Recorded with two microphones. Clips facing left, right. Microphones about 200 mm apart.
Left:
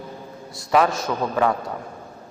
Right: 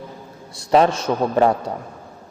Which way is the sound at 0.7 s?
30° right (ahead or behind).